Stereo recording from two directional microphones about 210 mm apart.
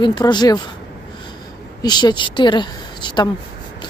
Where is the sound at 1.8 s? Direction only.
20° left (ahead or behind).